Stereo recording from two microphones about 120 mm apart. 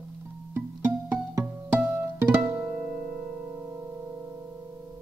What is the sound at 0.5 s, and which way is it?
Music, 20° right (ahead or behind).